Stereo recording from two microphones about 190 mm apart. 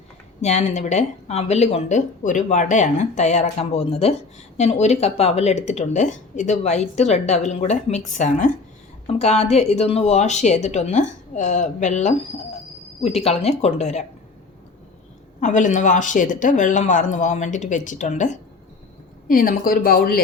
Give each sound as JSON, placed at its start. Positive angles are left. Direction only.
{"t": 0.4, "sound": "a woman's voice", "side_deg": 35}
{"t": 15.4, "sound": "a woman's voice", "side_deg": 40}